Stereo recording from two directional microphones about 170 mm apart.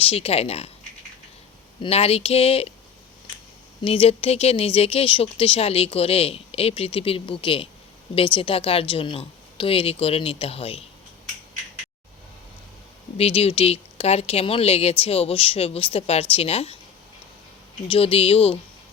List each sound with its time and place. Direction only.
0.0 s speech: 35° left (ahead or behind)
1.8 s speech: 35° left (ahead or behind)
3.8 s speech: 35° left (ahead or behind)
13.1 s speech: 35° left (ahead or behind)
17.8 s speech: 30° left (ahead or behind)